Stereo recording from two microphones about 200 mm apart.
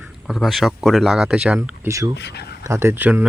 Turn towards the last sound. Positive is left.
turn(degrees=-10)  # may be behind; listen again after turning